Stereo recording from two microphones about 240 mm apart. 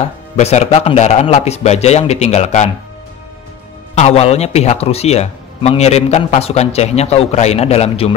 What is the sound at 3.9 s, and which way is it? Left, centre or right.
Speech, left.